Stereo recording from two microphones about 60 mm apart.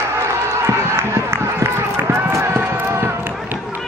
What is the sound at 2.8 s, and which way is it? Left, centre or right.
Run, right.